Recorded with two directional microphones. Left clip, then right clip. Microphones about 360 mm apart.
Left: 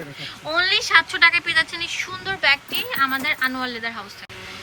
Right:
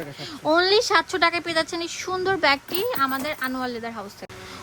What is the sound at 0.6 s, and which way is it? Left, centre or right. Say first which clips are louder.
A woman's voice: left 5 dB; centre.